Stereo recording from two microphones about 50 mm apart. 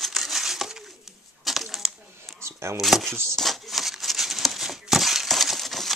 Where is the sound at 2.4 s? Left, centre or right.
Right.